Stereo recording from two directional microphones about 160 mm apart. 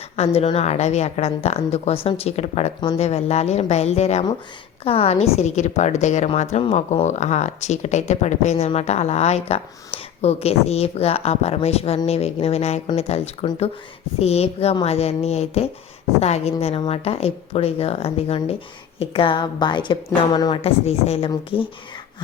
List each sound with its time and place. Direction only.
0.2 s a woman's voice: 40° left (ahead or behind)